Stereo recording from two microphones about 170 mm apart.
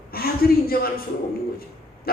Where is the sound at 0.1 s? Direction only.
60° left (ahead or behind).